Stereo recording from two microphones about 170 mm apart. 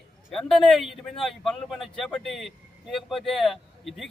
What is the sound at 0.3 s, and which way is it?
A man's voice, centre (ahead or behind).